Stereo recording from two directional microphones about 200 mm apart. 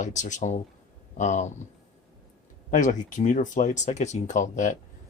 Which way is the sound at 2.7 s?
40° left (ahead or behind).